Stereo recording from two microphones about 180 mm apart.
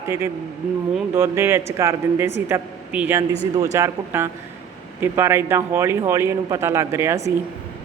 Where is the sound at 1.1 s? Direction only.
15° right (ahead or behind).